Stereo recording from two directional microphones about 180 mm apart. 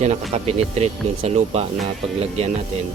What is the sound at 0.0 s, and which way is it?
Speech, 40° right (ahead or behind).